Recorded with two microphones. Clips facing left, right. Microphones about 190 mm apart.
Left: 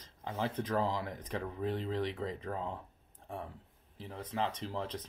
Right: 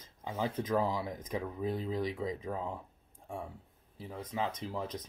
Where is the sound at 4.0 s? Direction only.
5° right (ahead or behind).